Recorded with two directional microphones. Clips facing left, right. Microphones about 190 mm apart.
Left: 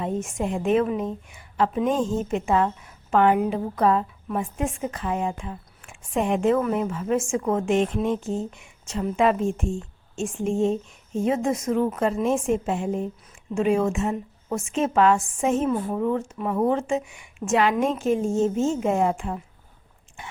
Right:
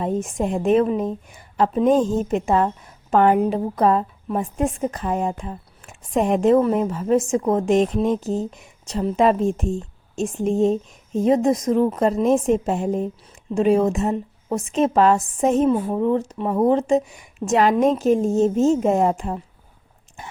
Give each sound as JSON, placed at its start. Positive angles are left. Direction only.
{"t": 0.0, "sound": "a woman's voice", "side_deg": -35}